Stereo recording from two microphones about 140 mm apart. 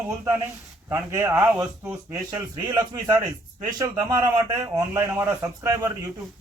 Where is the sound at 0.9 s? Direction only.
15° right (ahead or behind).